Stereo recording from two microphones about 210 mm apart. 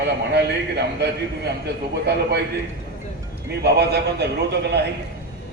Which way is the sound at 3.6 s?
50° right (ahead or behind).